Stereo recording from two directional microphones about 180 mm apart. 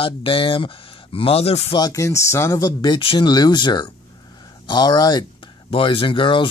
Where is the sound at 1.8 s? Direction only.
15° left (ahead or behind).